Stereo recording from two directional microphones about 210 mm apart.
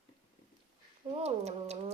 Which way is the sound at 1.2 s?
30° right (ahead or behind).